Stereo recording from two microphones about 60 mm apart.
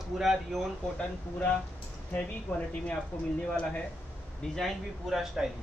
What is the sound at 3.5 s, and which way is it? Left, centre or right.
Speech, centre.